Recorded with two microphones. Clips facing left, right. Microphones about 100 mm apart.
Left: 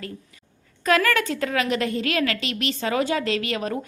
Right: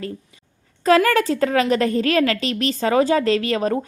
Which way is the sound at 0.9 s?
30° right (ahead or behind).